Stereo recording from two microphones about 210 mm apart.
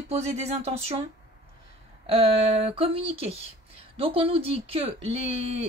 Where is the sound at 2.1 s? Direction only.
25° right (ahead or behind).